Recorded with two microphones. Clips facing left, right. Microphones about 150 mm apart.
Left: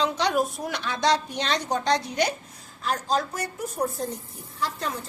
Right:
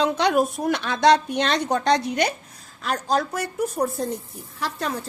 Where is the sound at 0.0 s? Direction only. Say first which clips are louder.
Right 4 dB; 55° right (ahead or behind).